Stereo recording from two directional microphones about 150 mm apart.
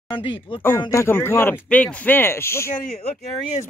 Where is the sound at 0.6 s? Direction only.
15° left (ahead or behind).